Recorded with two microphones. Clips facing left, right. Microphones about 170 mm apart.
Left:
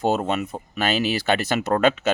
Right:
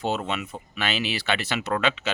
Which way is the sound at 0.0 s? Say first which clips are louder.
Left 6 dB; 45° left (ahead or behind).